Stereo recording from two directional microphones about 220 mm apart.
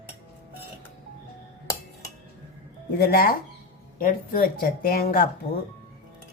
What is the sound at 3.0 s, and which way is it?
Speech, 45° left (ahead or behind).